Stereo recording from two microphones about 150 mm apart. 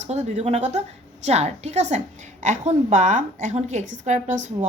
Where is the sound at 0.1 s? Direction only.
45° right (ahead or behind).